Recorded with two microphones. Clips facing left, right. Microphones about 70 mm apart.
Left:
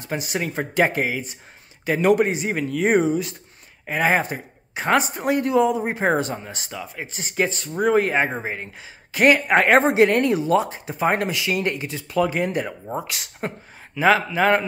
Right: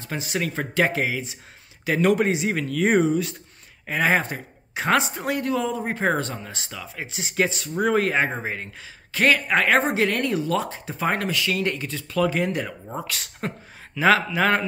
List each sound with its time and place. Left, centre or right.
0.0 s speech: centre
7.1 s speech: centre
9.1 s speech: centre
9.5 s speech: left
10.7 s speech: centre
11.1 s speech: centre